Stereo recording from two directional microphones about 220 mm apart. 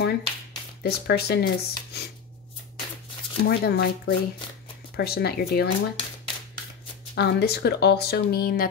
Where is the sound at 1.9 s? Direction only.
50° left (ahead or behind).